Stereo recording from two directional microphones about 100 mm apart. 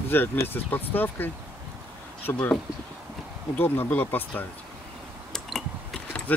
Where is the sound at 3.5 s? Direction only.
20° left (ahead or behind).